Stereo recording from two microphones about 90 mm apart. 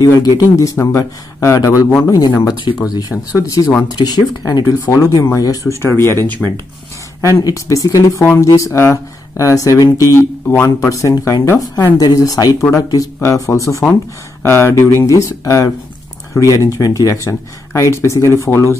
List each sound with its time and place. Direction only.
0.0 s speech: 45° left (ahead or behind); by 6.1 s 30° left (ahead or behind)
6.2 s speech: 15° left (ahead or behind)
7.2 s speech: 35° left (ahead or behind)
10.4 s speech: 20° left (ahead or behind)
10.8 s speech: 35° left (ahead or behind)